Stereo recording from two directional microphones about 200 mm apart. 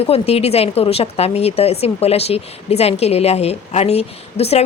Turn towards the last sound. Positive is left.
turn(degrees=30)  # may be behind; listen again after turning